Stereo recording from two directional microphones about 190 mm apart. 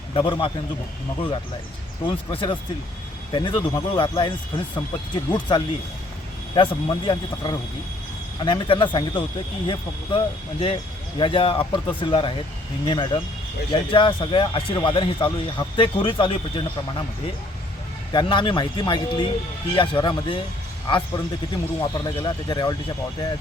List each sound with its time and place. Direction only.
0.1 s a man's voice: 25° left (ahead or behind)
2.0 s speech: 25° left (ahead or behind)
18.1 s speech: 25° left (ahead or behind)
21.8 s speech: 20° left (ahead or behind)